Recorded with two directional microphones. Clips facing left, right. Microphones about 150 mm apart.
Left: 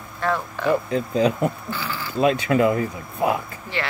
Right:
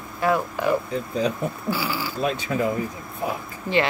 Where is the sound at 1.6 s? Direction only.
10° right (ahead or behind).